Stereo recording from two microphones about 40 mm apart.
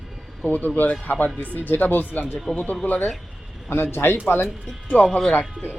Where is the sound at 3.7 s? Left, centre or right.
Left.